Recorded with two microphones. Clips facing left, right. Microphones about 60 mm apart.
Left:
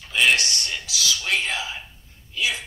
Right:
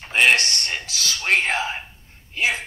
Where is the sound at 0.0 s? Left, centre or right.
Right.